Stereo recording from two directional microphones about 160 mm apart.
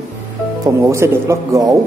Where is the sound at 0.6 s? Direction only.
15° right (ahead or behind).